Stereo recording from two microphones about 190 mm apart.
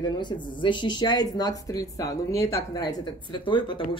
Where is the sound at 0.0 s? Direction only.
25° left (ahead or behind).